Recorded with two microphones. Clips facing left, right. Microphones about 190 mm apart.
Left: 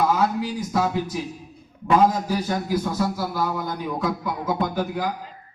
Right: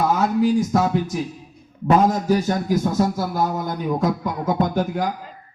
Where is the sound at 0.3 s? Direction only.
45° right (ahead or behind).